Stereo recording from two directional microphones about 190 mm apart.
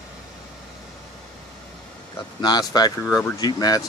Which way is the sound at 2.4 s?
20° left (ahead or behind).